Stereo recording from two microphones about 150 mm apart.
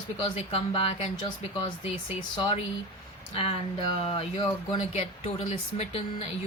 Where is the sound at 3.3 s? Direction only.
40° left (ahead or behind).